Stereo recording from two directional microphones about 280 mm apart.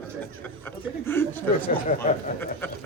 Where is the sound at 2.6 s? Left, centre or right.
Centre.